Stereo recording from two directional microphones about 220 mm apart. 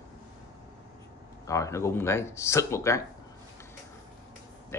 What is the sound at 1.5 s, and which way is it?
Speech, 15° left (ahead or behind).